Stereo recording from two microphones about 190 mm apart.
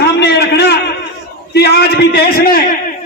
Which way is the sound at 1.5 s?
55° left (ahead or behind).